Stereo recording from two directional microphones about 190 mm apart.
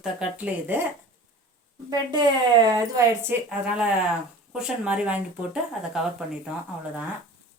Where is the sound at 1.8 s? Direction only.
25° right (ahead or behind).